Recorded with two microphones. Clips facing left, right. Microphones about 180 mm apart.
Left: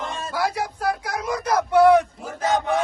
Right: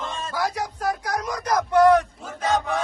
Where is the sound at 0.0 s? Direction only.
10° left (ahead or behind).